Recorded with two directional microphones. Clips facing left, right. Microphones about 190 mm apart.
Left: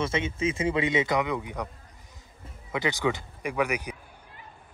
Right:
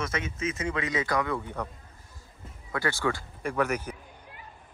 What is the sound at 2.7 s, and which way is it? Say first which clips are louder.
Speech: left 2 dB; 20° left (ahead or behind).